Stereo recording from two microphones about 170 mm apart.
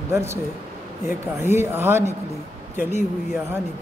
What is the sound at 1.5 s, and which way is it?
Speech, 15° right (ahead or behind).